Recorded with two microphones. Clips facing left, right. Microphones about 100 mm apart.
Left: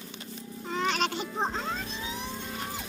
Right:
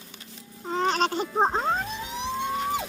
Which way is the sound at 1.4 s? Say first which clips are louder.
Right 9 dB; 45° right (ahead or behind).